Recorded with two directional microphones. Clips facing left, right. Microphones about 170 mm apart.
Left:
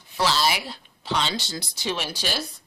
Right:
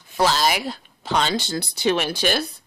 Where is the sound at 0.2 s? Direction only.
45° right (ahead or behind).